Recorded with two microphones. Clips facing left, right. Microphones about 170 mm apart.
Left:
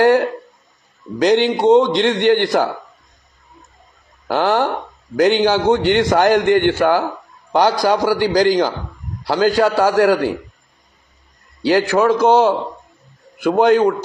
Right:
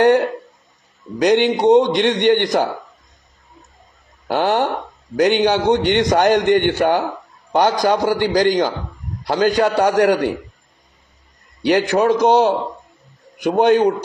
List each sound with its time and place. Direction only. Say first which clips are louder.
0.0 s a sound: even; 20° right (ahead or behind)
1.2 s a man's voice: even; 20° right (ahead or behind)
4.3 s a man's voice: left 1 dB; 20° right (ahead or behind)
11.6 s a man's voice: left 1 dB; 20° right (ahead or behind)